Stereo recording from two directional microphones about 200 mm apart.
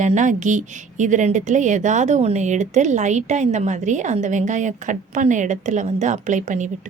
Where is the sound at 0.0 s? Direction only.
40° right (ahead or behind).